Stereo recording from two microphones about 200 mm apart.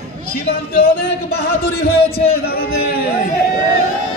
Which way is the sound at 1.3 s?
50° left (ahead or behind).